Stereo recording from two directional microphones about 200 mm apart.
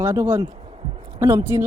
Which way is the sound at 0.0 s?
15° right (ahead or behind).